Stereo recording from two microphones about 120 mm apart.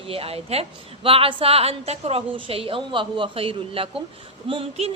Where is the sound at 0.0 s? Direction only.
50° right (ahead or behind).